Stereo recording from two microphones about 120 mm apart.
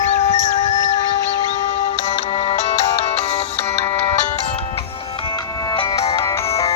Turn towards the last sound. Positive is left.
turn(degrees=45)  # may be behind; listen again after turning